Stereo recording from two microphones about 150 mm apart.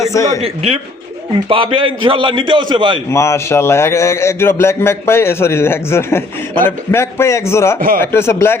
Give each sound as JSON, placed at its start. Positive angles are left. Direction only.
{"t": 0.0, "sound": "a sound", "side_deg": 20}
{"t": 0.4, "sound": "a man's voice", "side_deg": -40}
{"t": 3.1, "sound": "a man's voice", "side_deg": 20}
{"t": 7.8, "sound": "speech", "side_deg": -70}
{"t": 8.0, "sound": "a man's voice", "side_deg": 15}